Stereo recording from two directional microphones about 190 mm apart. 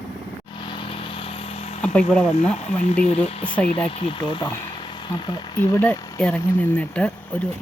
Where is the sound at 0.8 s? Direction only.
30° left (ahead or behind).